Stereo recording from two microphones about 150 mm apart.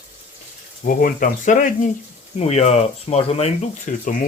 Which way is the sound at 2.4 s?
45° left (ahead or behind).